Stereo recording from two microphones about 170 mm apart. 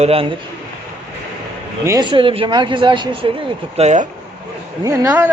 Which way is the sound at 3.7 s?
45° right (ahead or behind).